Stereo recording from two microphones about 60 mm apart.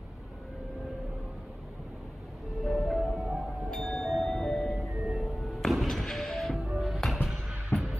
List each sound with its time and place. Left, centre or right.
2.6 s music: centre
7.7 s music: left